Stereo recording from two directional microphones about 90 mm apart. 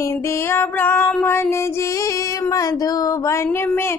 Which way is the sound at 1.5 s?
30° left (ahead or behind).